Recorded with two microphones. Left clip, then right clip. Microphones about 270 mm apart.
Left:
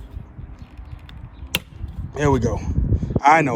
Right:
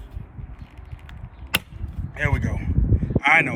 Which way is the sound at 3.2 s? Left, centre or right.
Right.